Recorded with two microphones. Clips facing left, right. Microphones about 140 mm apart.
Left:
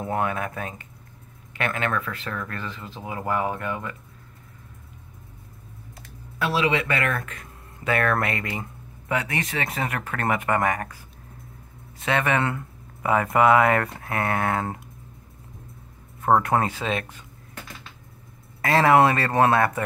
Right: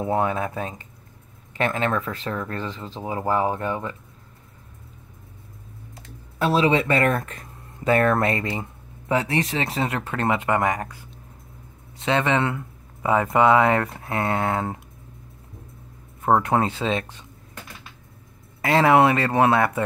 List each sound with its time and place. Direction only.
0.0 s speech: 20° right (ahead or behind)
6.4 s speech: 30° right (ahead or behind)
12.0 s speech: 25° right (ahead or behind)
16.4 s speech: 25° right (ahead or behind)
18.6 s speech: 15° right (ahead or behind)